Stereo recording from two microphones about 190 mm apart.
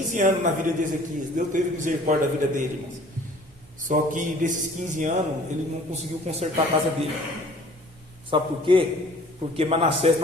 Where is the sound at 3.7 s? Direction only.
40° right (ahead or behind).